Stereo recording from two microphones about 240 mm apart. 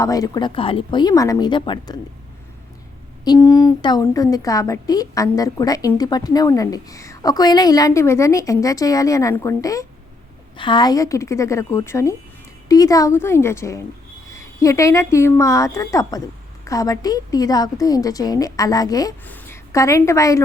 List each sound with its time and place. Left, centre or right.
0.0 s a woman's voice: centre
3.2 s a woman's voice: centre